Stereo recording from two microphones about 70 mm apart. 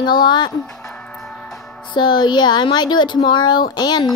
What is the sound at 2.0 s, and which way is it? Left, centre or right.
Speech, left.